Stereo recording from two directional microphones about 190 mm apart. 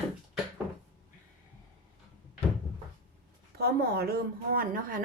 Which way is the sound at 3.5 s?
55° right (ahead or behind).